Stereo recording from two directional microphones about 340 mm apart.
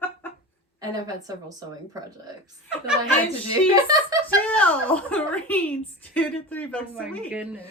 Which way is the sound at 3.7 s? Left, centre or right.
Centre.